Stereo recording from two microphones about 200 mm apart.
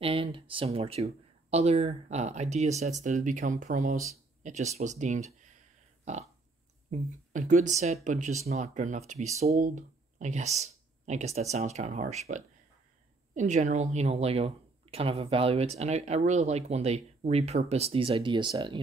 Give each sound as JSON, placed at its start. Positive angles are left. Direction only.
{"t": 0.0, "sound": "speech", "side_deg": -30}
{"t": 6.9, "sound": "speech", "side_deg": -40}